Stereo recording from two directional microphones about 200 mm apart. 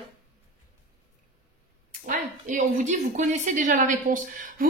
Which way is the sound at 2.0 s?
40° right (ahead or behind).